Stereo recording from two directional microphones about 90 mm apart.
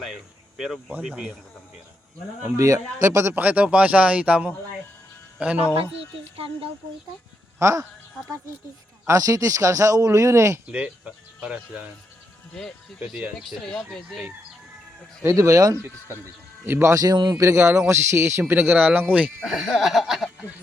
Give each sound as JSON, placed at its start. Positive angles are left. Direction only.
{"t": 0.0, "sound": "speech", "side_deg": -5}
{"t": 2.4, "sound": "speech", "side_deg": -35}
{"t": 3.3, "sound": "speech", "side_deg": -15}
{"t": 6.3, "sound": "speech", "side_deg": -90}
{"t": 7.6, "sound": "speech", "side_deg": -35}
{"t": 9.0, "sound": "speech", "side_deg": -35}
{"t": 10.7, "sound": "speech", "side_deg": -10}
{"t": 13.1, "sound": "speech", "side_deg": -5}
{"t": 15.2, "sound": "speech", "side_deg": -30}
{"t": 16.9, "sound": "a man's voice", "side_deg": -40}
{"t": 19.5, "sound": "speech", "side_deg": 0}